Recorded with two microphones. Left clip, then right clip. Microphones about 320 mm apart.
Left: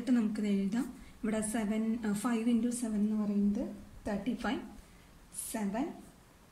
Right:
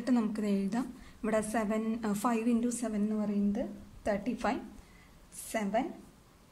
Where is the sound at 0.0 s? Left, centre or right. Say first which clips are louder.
Right 1 dB; centre.